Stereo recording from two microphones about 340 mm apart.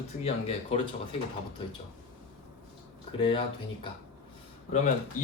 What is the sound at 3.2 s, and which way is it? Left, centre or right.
Speech, centre.